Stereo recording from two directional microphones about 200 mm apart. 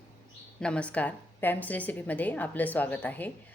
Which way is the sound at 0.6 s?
5° left (ahead or behind).